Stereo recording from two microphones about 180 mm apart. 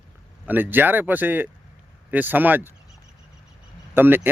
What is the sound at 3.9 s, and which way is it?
Speech, 10° right (ahead or behind).